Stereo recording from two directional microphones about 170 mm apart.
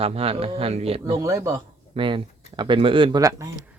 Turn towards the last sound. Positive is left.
turn(degrees=-20)  # may be behind; listen again after turning